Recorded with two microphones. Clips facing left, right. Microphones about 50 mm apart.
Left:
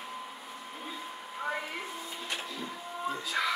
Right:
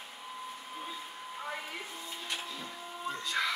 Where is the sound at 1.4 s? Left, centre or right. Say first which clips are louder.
Left 6 dB; centre.